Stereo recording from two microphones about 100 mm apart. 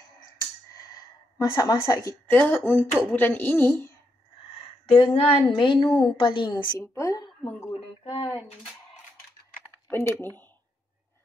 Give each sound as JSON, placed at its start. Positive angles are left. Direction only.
{"t": 0.4, "sound": "a sound", "side_deg": 40}
{"t": 2.2, "sound": "a woman's voice", "side_deg": 15}
{"t": 4.9, "sound": "speech", "side_deg": 70}
{"t": 5.5, "sound": "a woman's voice", "side_deg": 55}
{"t": 7.0, "sound": "a woman's voice", "side_deg": 35}
{"t": 8.0, "sound": "speech", "side_deg": 70}
{"t": 9.8, "sound": "a woman's voice", "side_deg": 25}